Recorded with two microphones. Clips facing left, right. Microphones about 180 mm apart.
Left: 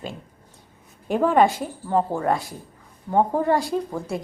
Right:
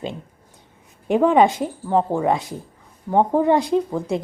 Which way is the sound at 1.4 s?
20° right (ahead or behind).